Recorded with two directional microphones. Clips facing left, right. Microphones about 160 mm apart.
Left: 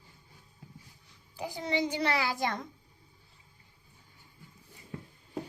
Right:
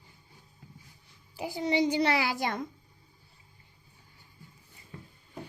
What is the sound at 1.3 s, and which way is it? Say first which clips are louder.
A child's voice: right 3 dB; 10° right (ahead or behind).